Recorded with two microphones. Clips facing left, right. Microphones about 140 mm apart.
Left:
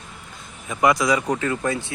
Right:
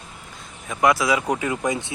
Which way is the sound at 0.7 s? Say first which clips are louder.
Even; centre (ahead or behind).